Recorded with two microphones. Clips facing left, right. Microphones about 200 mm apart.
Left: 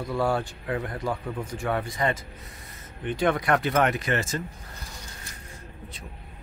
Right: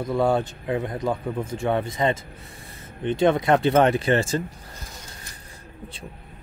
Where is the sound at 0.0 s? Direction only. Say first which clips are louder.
Right 4 dB; 20° right (ahead or behind).